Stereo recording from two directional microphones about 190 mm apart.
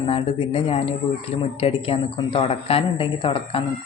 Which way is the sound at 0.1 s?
30° left (ahead or behind).